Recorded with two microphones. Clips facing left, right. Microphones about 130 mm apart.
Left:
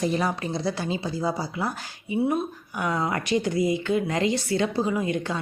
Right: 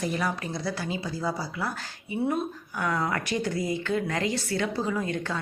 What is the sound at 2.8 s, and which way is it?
A woman's voice, 20° left (ahead or behind).